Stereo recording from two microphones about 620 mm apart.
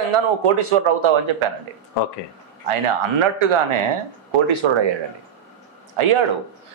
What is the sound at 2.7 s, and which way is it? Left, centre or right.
Speech, right.